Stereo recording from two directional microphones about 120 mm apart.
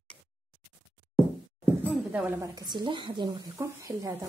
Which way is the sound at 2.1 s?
10° right (ahead or behind).